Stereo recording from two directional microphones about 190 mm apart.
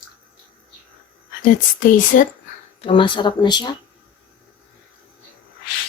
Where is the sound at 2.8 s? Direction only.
25° left (ahead or behind).